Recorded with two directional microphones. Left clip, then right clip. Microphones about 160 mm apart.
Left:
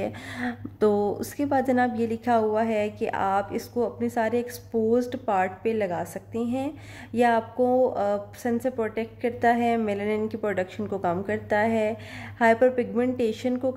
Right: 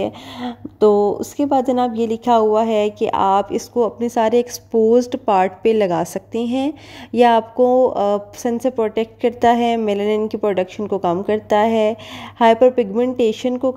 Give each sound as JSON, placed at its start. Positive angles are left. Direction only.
{"t": 0.0, "sound": "a woman's voice", "side_deg": -25}